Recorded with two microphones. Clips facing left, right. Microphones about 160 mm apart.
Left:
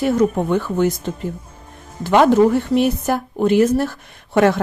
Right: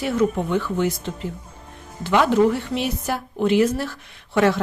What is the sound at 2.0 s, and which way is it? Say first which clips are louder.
A woman's voice: left 5 dB; 45° left (ahead or behind).